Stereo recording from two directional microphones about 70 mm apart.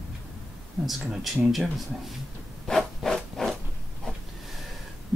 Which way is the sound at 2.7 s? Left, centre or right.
Centre.